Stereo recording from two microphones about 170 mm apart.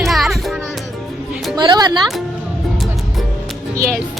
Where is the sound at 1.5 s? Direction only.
25° right (ahead or behind).